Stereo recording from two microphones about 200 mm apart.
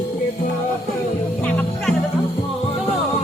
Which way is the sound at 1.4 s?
5° left (ahead or behind).